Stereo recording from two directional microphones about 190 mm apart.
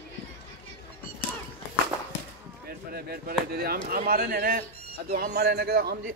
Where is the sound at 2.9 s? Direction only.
55° right (ahead or behind).